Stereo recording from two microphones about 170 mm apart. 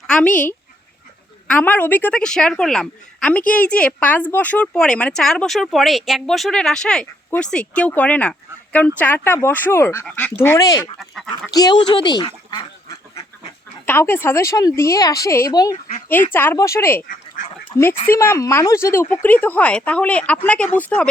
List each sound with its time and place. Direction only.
0.1 s a sound: 5° left (ahead or behind)
1.5 s a woman's voice: 10° left (ahead or behind)
11.0 s a woman's voice: centre (ahead or behind)
11.5 s speech: 25° left (ahead or behind)
13.8 s speech: 10° left (ahead or behind)
18.1 s speech: 15° left (ahead or behind)